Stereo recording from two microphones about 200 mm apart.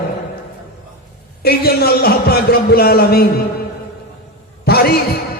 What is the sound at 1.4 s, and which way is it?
A man's voice, 50° left (ahead or behind).